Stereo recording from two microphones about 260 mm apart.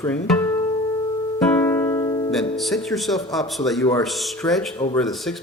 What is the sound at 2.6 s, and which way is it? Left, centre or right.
Speech, centre.